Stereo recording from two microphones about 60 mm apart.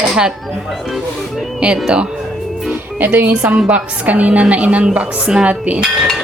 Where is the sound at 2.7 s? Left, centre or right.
Right.